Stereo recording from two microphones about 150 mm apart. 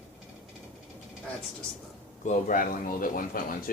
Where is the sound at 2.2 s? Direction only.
60° left (ahead or behind).